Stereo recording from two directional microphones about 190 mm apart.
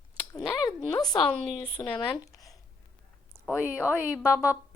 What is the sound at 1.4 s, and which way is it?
Speech, centre (ahead or behind).